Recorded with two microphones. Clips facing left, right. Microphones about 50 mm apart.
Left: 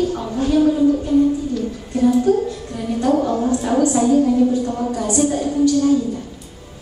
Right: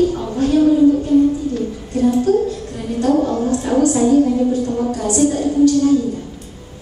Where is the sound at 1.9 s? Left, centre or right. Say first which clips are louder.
Even; centre.